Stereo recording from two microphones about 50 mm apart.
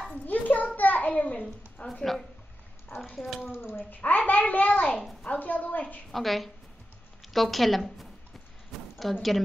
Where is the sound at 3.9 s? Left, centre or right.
Left.